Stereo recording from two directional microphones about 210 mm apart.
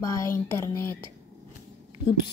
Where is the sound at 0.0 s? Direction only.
15° left (ahead or behind).